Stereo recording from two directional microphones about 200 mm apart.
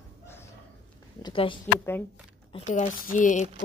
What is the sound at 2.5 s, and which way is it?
Speech, 35° left (ahead or behind).